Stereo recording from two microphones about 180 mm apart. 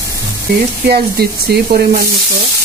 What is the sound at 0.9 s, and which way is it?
Speech, 60° right (ahead or behind).